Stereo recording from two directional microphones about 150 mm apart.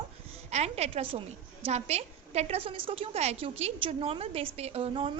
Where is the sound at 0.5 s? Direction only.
45° right (ahead or behind).